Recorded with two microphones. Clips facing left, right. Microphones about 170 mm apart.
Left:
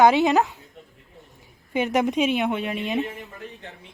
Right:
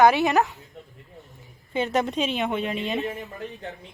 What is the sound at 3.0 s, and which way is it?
Speech, 40° right (ahead or behind).